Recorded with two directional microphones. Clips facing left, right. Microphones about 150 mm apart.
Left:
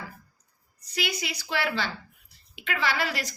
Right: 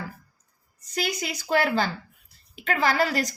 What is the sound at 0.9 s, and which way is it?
A woman's voice, 45° right (ahead or behind).